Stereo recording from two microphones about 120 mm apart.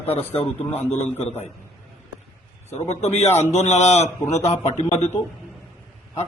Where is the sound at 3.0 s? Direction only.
65° left (ahead or behind).